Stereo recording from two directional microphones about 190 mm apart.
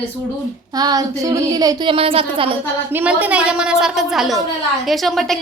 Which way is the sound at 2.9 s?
10° right (ahead or behind).